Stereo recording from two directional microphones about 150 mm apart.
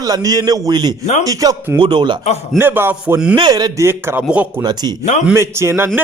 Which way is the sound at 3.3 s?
30° right (ahead or behind).